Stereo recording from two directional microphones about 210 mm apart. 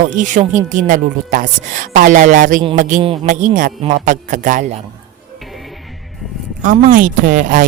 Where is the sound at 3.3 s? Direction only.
35° right (ahead or behind).